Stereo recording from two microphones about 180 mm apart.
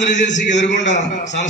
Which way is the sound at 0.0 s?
45° left (ahead or behind).